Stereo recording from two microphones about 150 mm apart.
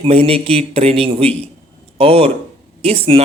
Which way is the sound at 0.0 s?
40° right (ahead or behind).